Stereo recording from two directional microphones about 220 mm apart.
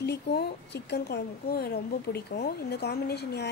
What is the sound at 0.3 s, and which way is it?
A woman's voice, 50° left (ahead or behind).